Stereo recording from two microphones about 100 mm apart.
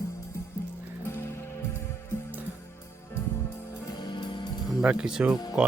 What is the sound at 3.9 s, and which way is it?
Music, 50° left (ahead or behind).